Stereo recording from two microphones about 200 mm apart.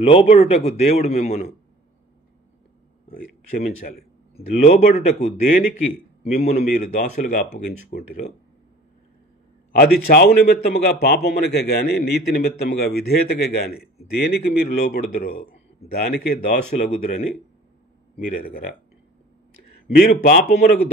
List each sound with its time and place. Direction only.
0.0 s speech: 30° left (ahead or behind)
3.1 s speech: 45° left (ahead or behind)
4.6 s speech: 35° left (ahead or behind)
9.7 s a man's voice: 50° left (ahead or behind)
18.3 s a man's voice: 45° left (ahead or behind)
19.9 s a man's voice: 50° left (ahead or behind)